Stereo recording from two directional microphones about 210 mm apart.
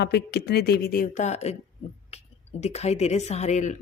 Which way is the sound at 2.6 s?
30° left (ahead or behind).